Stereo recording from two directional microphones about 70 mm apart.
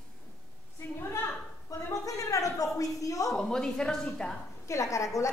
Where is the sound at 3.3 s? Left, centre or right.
Centre.